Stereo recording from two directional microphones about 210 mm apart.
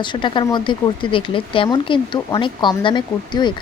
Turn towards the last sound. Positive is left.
turn(degrees=20)  # may be behind; listen again after turning